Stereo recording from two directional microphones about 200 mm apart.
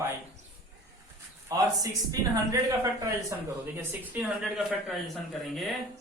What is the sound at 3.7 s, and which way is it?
Speech, 5° right (ahead or behind).